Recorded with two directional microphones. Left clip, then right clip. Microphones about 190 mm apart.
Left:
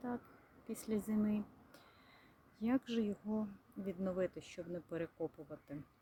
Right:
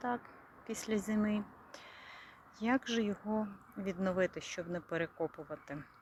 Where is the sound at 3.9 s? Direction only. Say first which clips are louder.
Right 5 dB; centre (ahead or behind).